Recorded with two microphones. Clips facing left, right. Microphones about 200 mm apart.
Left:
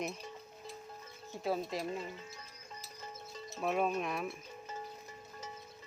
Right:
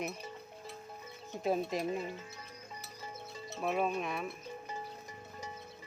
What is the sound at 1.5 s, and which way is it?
Stir, 20° right (ahead or behind).